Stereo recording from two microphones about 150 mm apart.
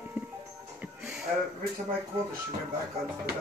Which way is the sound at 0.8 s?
15° right (ahead or behind).